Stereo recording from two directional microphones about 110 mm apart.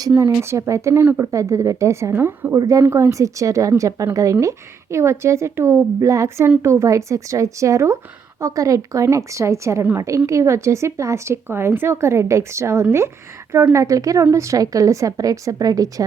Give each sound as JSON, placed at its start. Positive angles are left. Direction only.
{"t": 0.1, "sound": "speech", "side_deg": -20}
{"t": 2.6, "sound": "a woman's voice", "side_deg": -30}